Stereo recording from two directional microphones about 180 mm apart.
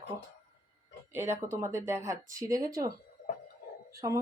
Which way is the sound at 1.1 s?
15° right (ahead or behind).